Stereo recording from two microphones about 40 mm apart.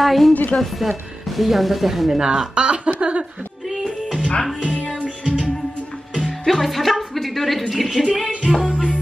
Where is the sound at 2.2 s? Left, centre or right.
Centre.